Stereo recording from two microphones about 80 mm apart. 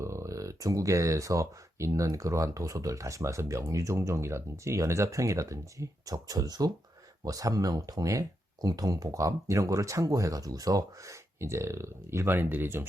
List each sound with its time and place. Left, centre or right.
0.0 s speech: right